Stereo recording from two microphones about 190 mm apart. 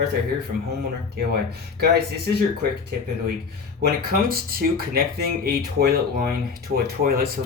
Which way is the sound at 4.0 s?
50° right (ahead or behind).